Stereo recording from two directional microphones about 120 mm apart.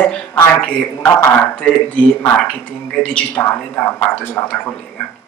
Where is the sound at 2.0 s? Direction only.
10° left (ahead or behind).